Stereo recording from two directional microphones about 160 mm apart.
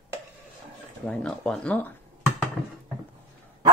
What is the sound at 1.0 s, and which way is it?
Speech, 5° left (ahead or behind).